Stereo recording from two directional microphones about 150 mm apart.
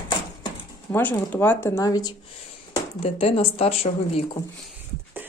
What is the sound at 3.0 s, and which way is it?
Speech, 40° left (ahead or behind).